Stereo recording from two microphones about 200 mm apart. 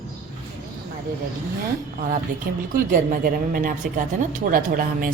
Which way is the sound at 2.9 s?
45° right (ahead or behind).